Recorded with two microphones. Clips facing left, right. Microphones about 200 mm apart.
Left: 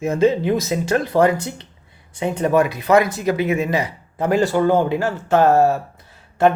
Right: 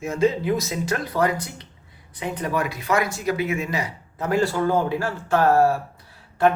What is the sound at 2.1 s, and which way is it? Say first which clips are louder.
A man's voice: left 8 dB; 25° left (ahead or behind).